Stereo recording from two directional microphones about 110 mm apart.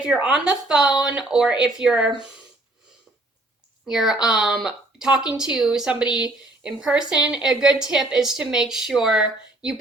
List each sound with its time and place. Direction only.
0.0 s speech: 10° right (ahead or behind)
3.8 s speech: 5° right (ahead or behind)